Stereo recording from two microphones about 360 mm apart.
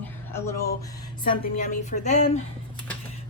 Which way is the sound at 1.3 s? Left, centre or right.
Left.